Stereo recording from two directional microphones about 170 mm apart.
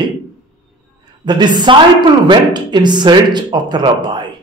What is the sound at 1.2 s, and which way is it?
A woman's voice, 25° right (ahead or behind).